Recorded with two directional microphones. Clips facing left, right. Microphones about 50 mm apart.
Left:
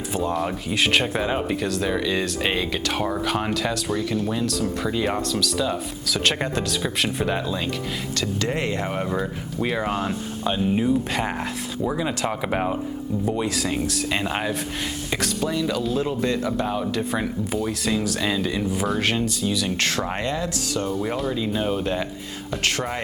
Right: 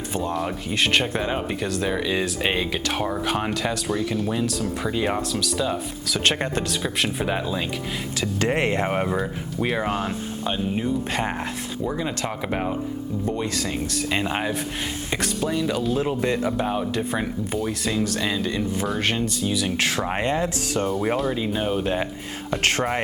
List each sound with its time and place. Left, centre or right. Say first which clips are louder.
0.1 s speech: left 2 dB; centre
8.4 s speech: right 5 dB; right
9.1 s speech: even; centre
16.0 s speech: even; centre
20.1 s speech: right 3 dB; right
21.3 s speech: even; centre